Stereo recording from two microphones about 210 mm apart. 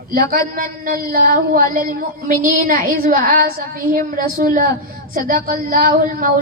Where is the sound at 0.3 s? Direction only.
40° right (ahead or behind).